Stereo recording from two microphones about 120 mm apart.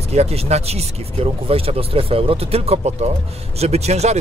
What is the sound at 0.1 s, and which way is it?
Speech, 65° right (ahead or behind).